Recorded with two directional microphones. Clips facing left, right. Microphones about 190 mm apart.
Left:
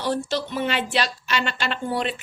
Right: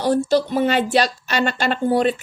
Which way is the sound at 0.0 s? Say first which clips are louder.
Right 8 dB; 40° right (ahead or behind).